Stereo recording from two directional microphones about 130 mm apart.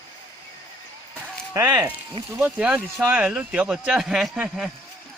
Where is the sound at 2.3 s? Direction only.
10° right (ahead or behind).